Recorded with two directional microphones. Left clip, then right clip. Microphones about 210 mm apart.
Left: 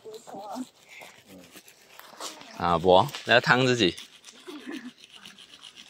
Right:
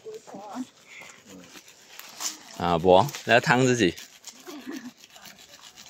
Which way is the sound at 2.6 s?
25° right (ahead or behind).